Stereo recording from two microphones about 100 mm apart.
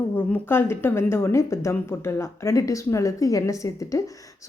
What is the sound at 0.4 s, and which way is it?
A woman's voice, 25° left (ahead or behind).